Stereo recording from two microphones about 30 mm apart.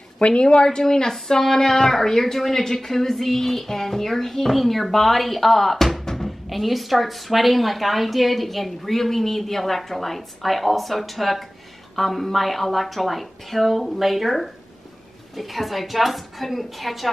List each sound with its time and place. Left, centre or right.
0.3 s speech: left
0.7 s speech: left
1.1 s speech: centre